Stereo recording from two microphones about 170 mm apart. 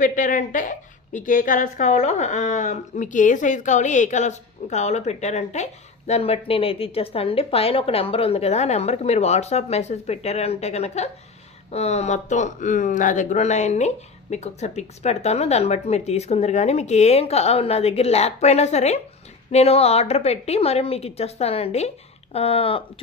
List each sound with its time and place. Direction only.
0.0 s a woman's voice: 50° left (ahead or behind); by 22.8 s 35° left (ahead or behind)